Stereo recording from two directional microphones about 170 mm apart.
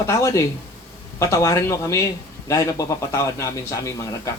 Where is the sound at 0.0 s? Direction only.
15° left (ahead or behind).